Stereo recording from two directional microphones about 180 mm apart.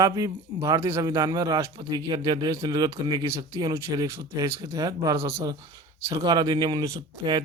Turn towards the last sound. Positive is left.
turn(degrees=-25)  # may be behind; listen again after turning